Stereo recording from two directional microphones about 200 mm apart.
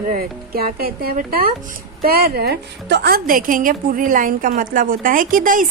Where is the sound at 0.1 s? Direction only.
50° right (ahead or behind).